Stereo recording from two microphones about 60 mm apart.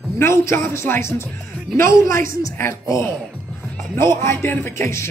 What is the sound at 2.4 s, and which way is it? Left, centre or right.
Speech, left.